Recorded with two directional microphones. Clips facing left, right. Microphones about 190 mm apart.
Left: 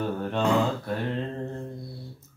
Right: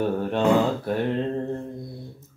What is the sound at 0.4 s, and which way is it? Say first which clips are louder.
Speech: right 4 dB; 25° right (ahead or behind).